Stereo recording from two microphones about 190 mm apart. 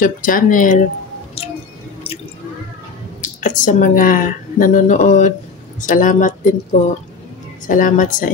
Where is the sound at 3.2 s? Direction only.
40° left (ahead or behind).